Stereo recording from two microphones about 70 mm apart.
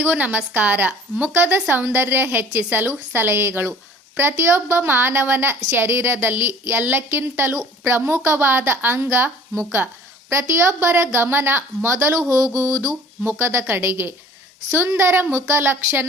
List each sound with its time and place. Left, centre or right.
0.0 s a woman's voice: right
12.5 s a sound: right
13.2 s a woman's voice: right